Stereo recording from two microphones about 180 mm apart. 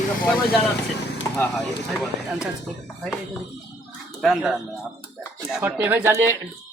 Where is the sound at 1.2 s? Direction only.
15° left (ahead or behind).